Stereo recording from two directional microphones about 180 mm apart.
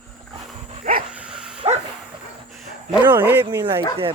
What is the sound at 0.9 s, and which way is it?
Dog, 45° right (ahead or behind).